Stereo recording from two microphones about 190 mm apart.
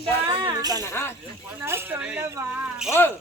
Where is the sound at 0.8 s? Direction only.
15° left (ahead or behind).